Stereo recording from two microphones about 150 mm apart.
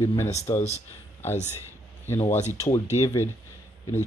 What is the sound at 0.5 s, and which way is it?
Speech, 20° left (ahead or behind).